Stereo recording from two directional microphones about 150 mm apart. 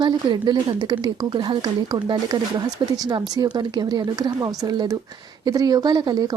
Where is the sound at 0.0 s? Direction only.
30° right (ahead or behind).